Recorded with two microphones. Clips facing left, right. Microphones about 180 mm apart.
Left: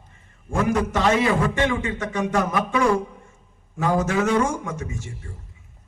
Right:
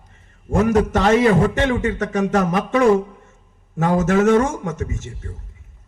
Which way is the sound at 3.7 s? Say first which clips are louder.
Right 4 dB; 40° right (ahead or behind).